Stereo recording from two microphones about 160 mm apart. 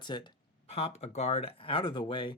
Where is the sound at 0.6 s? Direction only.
40° left (ahead or behind).